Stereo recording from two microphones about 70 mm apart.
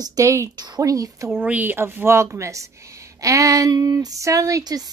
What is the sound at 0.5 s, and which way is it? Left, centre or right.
Speech, right.